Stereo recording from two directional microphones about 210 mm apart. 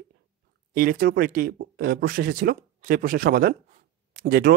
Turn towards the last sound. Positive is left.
turn(degrees=-45)  # may be behind; listen again after turning